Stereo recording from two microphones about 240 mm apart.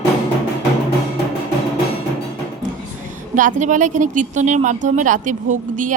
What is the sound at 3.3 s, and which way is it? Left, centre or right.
A woman's voice, right.